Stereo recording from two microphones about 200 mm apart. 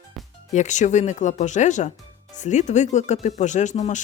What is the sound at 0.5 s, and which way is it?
Speech, 35° left (ahead or behind).